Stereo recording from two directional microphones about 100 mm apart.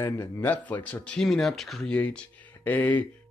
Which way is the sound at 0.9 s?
15° left (ahead or behind).